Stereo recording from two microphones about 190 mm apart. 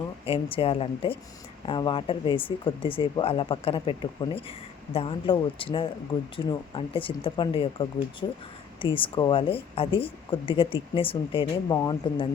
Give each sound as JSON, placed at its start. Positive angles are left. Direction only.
{"t": 0.3, "sound": "speech", "side_deg": 30}